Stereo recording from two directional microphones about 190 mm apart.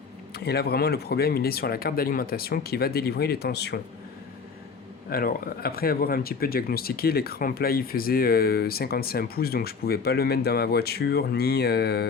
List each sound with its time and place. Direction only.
0.3 s speech: 55° left (ahead or behind)
5.0 s speech: 50° left (ahead or behind)